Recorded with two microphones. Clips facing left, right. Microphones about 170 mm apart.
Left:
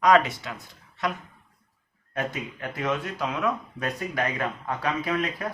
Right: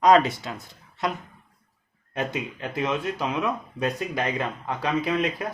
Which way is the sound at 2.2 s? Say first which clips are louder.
Right 2 dB; 25° right (ahead or behind).